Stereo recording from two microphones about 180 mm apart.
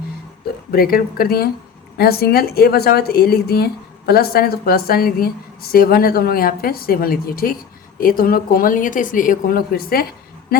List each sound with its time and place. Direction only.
0.7 s a woman's voice: 55° left (ahead or behind)